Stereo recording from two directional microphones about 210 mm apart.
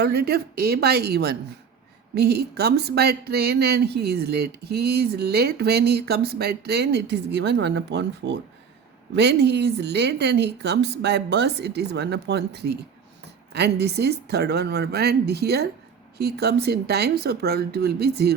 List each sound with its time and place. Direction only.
0.0 s speech: 50° right (ahead or behind)